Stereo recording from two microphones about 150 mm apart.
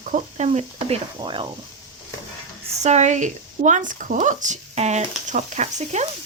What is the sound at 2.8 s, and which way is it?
Speech, 50° right (ahead or behind).